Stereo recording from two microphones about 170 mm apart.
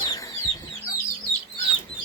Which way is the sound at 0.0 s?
20° left (ahead or behind).